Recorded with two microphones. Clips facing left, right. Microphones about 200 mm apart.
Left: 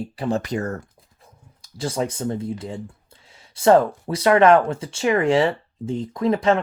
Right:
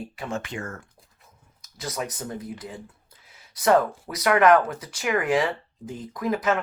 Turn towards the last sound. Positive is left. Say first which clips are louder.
# left 5 dB
turn(degrees=30)  # may be behind; listen again after turning